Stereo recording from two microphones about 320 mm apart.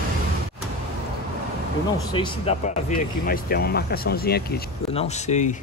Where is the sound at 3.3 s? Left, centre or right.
Left.